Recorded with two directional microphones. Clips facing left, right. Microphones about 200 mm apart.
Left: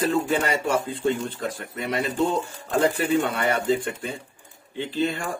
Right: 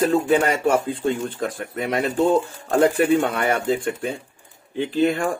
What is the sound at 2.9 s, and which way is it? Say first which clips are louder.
Speech: right 4 dB; 50° right (ahead or behind).